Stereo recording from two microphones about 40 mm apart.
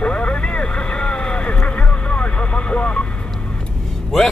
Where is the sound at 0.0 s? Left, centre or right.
Left.